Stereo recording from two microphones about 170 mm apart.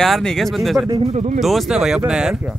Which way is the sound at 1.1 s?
40° right (ahead or behind).